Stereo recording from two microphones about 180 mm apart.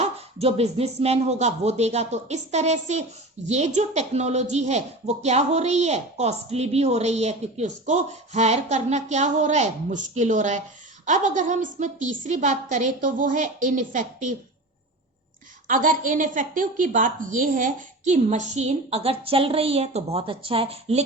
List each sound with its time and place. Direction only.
0.0 s a woman's voice: 35° right (ahead or behind)
15.6 s a woman's voice: 45° right (ahead or behind)